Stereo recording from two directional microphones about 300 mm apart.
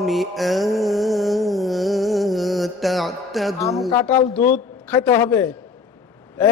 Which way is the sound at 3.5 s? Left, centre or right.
Centre.